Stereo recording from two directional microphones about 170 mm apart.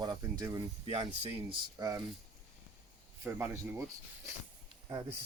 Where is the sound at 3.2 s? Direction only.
15° right (ahead or behind).